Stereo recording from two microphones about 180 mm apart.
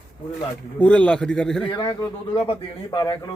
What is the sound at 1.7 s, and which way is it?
Speech, 25° left (ahead or behind).